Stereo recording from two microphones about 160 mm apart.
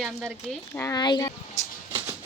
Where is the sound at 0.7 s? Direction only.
20° left (ahead or behind).